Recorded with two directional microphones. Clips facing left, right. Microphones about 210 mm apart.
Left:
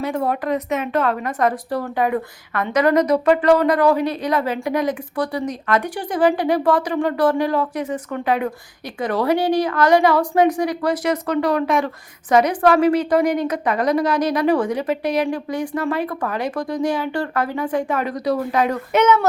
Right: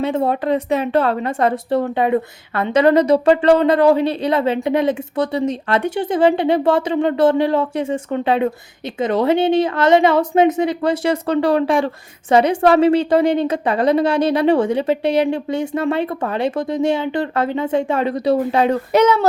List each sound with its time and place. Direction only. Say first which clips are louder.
0.0 s speech: right 4 dB; 25° right (ahead or behind)